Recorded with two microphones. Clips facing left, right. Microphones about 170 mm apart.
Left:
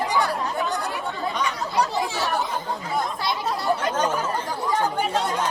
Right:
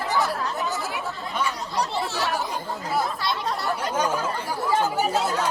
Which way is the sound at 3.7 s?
10° right (ahead or behind).